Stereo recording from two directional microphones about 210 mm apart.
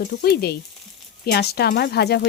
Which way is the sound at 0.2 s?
50° left (ahead or behind).